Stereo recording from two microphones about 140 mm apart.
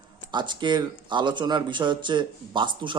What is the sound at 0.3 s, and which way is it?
A man's voice, 35° right (ahead or behind).